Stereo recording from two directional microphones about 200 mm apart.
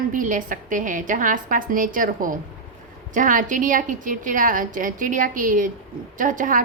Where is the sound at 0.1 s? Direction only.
40° right (ahead or behind).